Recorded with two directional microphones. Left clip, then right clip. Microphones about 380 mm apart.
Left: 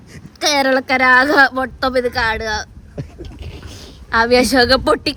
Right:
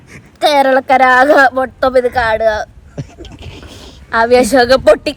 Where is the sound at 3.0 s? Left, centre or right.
Right.